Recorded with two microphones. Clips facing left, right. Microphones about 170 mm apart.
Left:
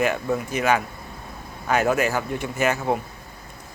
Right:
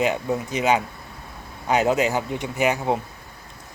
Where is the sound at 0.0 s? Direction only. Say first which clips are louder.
Even; 20° right (ahead or behind).